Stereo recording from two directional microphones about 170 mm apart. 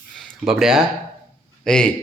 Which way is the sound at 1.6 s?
5° left (ahead or behind).